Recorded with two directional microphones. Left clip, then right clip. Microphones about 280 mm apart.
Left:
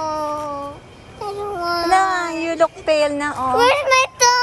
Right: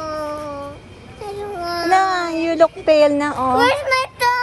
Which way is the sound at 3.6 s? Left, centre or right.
Centre.